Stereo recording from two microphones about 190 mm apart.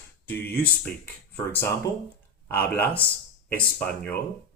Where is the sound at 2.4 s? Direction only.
10° left (ahead or behind).